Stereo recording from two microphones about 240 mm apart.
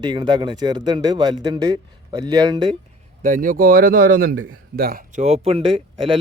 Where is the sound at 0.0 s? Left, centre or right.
Centre.